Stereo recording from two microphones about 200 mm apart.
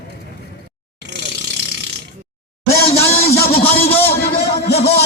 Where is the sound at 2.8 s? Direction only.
30° left (ahead or behind).